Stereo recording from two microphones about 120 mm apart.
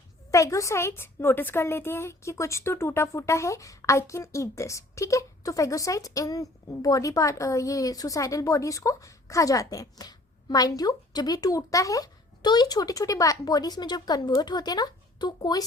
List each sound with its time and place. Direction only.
0.3 s a woman's voice: 25° left (ahead or behind)